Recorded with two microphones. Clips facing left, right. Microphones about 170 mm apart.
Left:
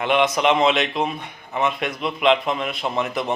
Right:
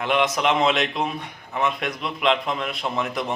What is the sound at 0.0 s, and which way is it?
A man's voice, centre (ahead or behind).